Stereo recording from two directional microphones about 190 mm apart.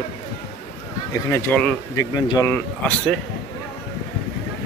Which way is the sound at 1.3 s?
10° left (ahead or behind).